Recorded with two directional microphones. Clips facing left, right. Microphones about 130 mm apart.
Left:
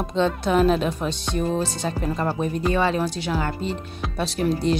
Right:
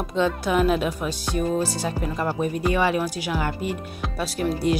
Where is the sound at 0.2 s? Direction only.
10° right (ahead or behind).